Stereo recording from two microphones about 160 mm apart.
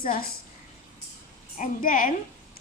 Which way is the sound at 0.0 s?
60° left (ahead or behind).